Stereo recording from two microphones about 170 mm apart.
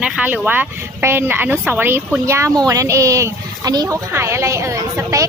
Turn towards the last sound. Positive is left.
turn(degrees=-20)  # may be behind; listen again after turning